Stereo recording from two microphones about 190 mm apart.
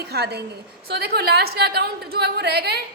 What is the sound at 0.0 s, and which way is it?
A woman's voice, 60° right (ahead or behind).